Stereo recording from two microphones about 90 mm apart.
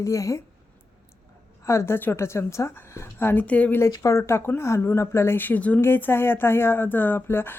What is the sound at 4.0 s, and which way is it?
Speech, 35° left (ahead or behind).